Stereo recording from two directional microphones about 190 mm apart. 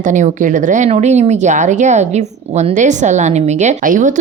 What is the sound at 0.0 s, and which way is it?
A woman's voice, 40° right (ahead or behind).